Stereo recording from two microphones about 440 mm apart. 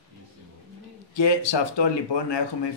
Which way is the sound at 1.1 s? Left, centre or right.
Left.